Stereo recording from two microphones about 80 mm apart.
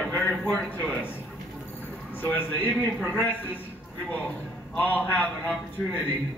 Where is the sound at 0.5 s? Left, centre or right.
Centre.